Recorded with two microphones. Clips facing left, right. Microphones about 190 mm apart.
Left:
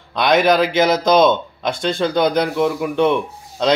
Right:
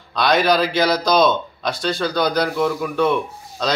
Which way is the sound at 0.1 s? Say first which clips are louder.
Left 2 dB; 20° left (ahead or behind).